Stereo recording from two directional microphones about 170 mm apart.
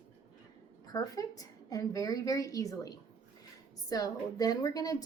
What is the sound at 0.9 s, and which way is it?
Speech, 20° left (ahead or behind).